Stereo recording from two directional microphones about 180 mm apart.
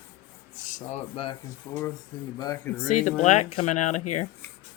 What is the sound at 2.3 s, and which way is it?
Speech, 20° left (ahead or behind).